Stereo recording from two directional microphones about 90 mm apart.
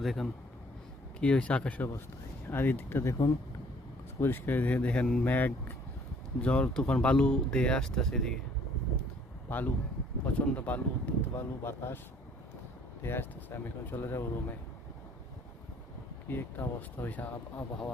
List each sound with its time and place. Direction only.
0.0 s speech: centre (ahead or behind)
1.2 s speech: 15° left (ahead or behind); by 3.3 s 35° left (ahead or behind)
4.2 s speech: 25° left (ahead or behind); by 8.4 s 5° left (ahead or behind)
9.5 s speech: 20° left (ahead or behind)
13.0 s speech: 25° left (ahead or behind)
16.3 s speech: 25° left (ahead or behind)